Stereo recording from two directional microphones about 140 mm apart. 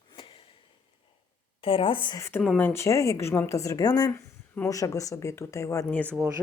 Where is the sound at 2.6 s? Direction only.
15° left (ahead or behind).